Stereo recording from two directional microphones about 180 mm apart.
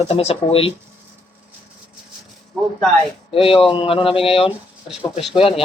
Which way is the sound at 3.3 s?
30° left (ahead or behind).